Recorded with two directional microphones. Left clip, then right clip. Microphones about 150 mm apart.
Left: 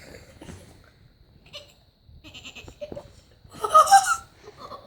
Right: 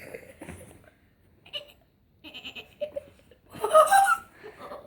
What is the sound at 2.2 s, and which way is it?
Goat, 15° left (ahead or behind).